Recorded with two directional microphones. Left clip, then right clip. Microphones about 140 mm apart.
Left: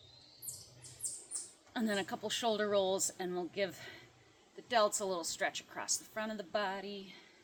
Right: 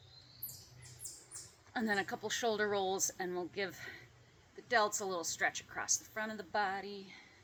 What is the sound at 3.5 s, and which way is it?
A woman's voice, 70° left (ahead or behind).